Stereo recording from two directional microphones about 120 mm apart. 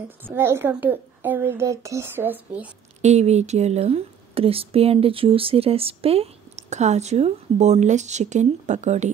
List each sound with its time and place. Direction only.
0.2 s a woman's voice: 20° right (ahead or behind)
3.0 s speech: 70° right (ahead or behind)